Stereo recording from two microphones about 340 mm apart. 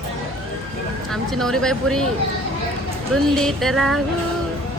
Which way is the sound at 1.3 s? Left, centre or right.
Centre.